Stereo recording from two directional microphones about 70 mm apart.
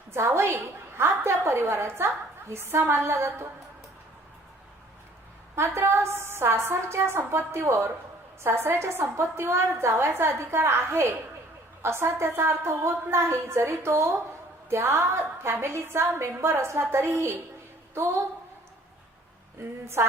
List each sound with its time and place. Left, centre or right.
0.1 s a woman's voice: right
5.5 s a woman's voice: right
8.4 s a woman's voice: right
20.0 s a woman's voice: right